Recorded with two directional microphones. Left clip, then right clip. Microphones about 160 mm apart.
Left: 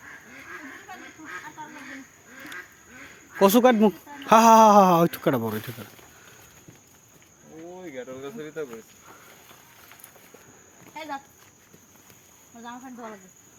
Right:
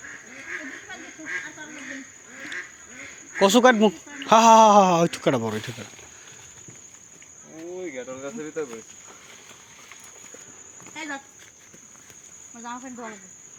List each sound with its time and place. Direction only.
3.3 s speech: 40° left (ahead or behind); by 5.5 s 20° left (ahead or behind)
5.5 s speech: 10° left (ahead or behind)
7.9 s cricket: 5° left (ahead or behind)